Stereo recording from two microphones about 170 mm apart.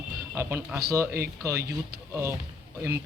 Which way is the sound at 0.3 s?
15° right (ahead or behind).